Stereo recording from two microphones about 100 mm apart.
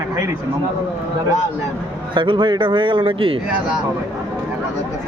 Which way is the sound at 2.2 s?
55° right (ahead or behind).